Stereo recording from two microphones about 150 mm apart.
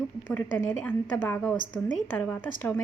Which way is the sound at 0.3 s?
10° left (ahead or behind).